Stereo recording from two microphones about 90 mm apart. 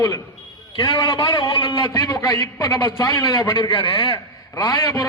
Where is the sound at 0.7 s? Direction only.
60° left (ahead or behind).